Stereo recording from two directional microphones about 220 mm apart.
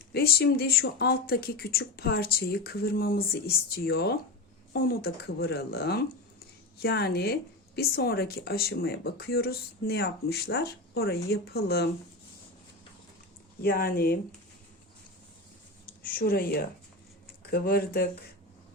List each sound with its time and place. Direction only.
0.1 s speech: 45° left (ahead or behind)
13.6 s speech: 45° left (ahead or behind)
16.0 s speech: 40° left (ahead or behind)